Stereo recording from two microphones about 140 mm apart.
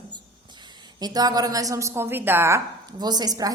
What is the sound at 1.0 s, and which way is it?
A woman's voice, 30° right (ahead or behind).